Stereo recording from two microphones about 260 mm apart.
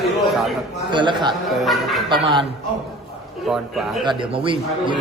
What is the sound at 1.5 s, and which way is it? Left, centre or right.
Speech, centre.